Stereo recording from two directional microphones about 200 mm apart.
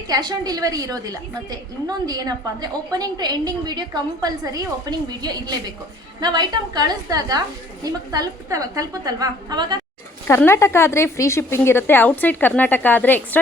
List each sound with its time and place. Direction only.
0.1 s a woman's voice: 20° right (ahead or behind)
10.2 s a woman's voice: 10° left (ahead or behind)